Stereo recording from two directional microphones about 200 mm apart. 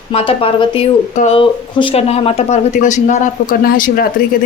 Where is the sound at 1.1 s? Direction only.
35° left (ahead or behind).